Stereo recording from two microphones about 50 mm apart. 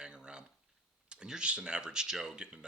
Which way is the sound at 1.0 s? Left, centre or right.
Centre.